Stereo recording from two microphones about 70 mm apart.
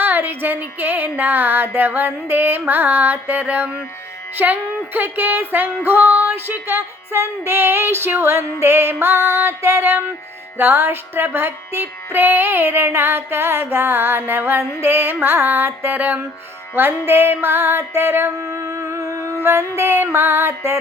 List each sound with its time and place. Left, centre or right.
0.0 s a sound: right
4.4 s music: right
19.4 s music: right